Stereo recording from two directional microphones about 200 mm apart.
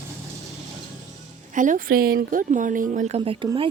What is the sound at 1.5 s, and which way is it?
Speech, 40° right (ahead or behind).